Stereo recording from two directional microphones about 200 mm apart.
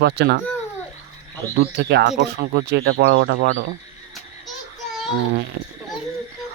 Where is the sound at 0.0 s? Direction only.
60° right (ahead or behind).